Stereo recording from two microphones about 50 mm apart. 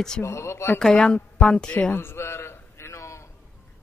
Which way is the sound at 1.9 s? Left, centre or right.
Left.